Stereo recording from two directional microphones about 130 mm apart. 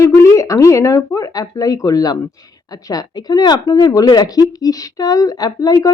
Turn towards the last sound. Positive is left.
turn(degrees=30)  # may be behind; listen again after turning